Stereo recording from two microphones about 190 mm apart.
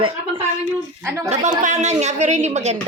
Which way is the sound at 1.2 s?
40° right (ahead or behind).